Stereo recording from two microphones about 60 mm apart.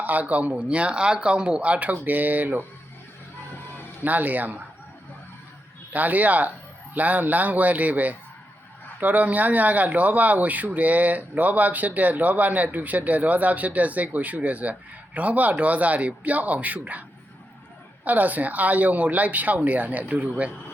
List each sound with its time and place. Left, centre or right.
0.0 s speech: right
4.0 s speech: right
5.9 s speech: right
18.0 s speech: right